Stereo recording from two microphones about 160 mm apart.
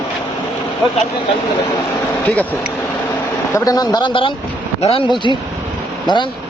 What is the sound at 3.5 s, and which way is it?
Speech, 20° left (ahead or behind).